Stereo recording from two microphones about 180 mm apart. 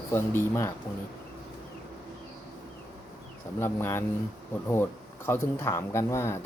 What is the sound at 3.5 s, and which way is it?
Speech, 15° left (ahead or behind).